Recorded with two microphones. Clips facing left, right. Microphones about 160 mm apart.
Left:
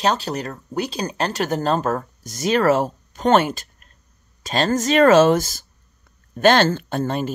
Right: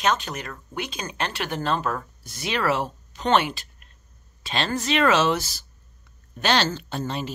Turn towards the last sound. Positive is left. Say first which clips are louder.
# left 6 dB
turn(degrees=50)  # may be behind; listen again after turning